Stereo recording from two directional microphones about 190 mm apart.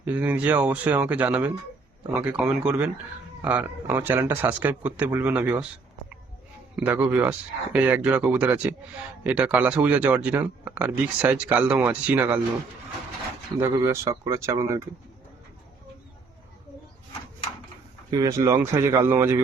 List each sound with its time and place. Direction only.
0.0 s speech: 10° right (ahead or behind)
6.7 s speech: 10° right (ahead or behind)
13.6 s speech: 15° right (ahead or behind)
18.1 s speech: 20° right (ahead or behind)